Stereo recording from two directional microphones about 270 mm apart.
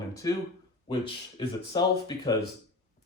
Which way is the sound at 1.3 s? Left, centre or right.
Centre.